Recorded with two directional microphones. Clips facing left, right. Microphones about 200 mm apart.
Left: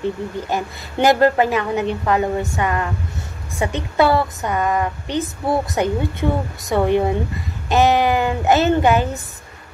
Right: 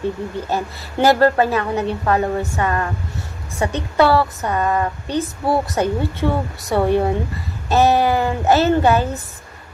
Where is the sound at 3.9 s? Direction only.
15° left (ahead or behind).